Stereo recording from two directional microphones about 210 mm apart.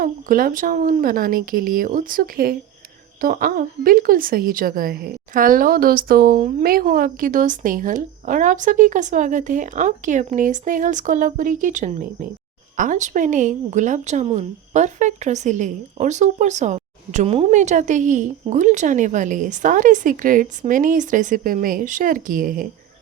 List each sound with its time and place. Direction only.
0.0 s a woman's voice: 40° right (ahead or behind)